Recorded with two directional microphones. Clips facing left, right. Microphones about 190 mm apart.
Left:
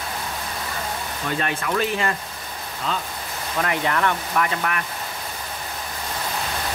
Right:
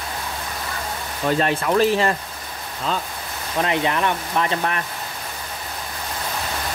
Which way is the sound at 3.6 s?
20° right (ahead or behind).